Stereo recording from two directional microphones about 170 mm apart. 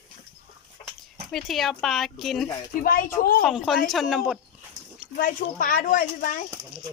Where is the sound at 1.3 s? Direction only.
Centre (ahead or behind).